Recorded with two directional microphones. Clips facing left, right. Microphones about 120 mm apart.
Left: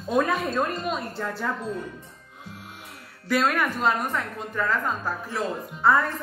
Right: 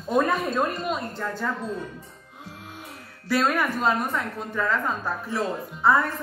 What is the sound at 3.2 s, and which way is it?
A woman's voice, centre (ahead or behind).